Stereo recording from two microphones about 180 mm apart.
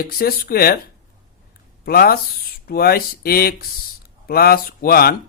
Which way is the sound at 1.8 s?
55° left (ahead or behind).